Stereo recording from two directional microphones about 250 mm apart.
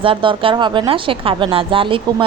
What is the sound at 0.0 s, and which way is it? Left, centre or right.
Speech, centre.